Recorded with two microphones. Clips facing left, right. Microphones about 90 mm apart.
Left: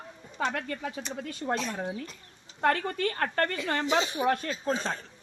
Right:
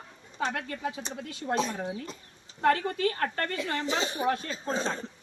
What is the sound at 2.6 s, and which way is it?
Speech, 45° left (ahead or behind).